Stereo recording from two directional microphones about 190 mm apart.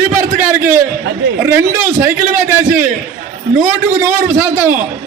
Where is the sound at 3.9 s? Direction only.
10° right (ahead or behind).